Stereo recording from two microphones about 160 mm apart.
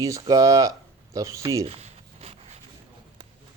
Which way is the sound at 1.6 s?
40° right (ahead or behind).